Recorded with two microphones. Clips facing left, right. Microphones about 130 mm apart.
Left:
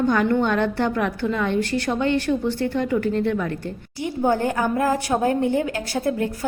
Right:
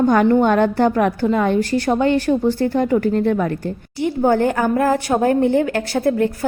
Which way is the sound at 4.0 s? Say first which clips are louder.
Right 5 dB; 60° right (ahead or behind).